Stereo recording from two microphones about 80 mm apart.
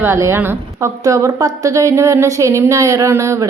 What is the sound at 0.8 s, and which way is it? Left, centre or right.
A woman's voice, right.